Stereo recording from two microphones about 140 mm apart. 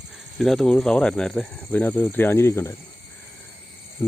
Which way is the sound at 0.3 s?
Centre (ahead or behind).